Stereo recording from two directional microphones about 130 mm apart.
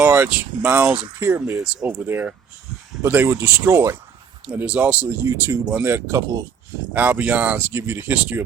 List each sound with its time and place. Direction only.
0.0 s speech: 15° right (ahead or behind)
4.4 s speech: 10° right (ahead or behind)
6.9 s speech: 10° right (ahead or behind)